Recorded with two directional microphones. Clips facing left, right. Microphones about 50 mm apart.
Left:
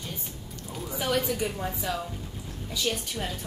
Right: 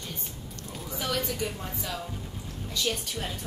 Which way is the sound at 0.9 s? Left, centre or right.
Centre.